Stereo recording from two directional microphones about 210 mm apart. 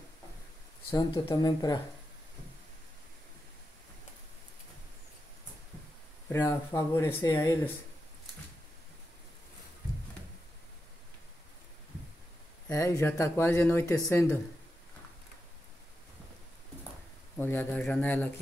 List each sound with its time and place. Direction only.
0.8 s speech: 15° left (ahead or behind)
6.4 s speech: 15° left (ahead or behind)
12.6 s speech: 15° left (ahead or behind)
17.4 s speech: 10° left (ahead or behind)